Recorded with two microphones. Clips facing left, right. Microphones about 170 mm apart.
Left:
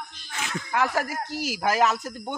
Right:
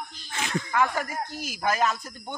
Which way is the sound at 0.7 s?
90° left.